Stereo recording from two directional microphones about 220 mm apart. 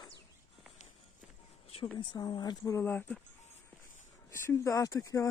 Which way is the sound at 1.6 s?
25° left (ahead or behind).